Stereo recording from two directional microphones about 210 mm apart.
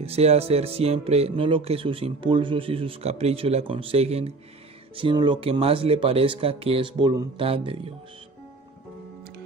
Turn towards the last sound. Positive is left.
turn(degrees=-25)  # may be behind; listen again after turning